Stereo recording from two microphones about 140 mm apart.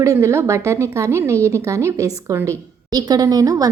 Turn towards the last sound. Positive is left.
turn(degrees=-25)  # may be behind; listen again after turning